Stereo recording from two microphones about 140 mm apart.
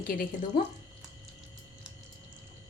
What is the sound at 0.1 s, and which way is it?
Speech, 85° left.